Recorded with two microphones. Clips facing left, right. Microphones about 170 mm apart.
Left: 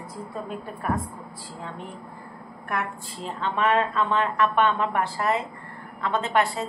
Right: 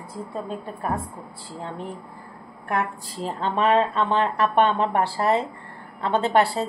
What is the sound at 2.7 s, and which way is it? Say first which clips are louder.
A woman's voice: right 4 dB; 35° right (ahead or behind).